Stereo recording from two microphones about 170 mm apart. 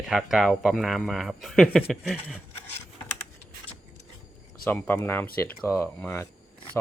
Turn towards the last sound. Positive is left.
turn(degrees=15)  # may be behind; listen again after turning